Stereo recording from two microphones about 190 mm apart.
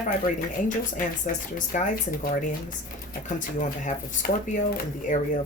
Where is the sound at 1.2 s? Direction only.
40° left (ahead or behind).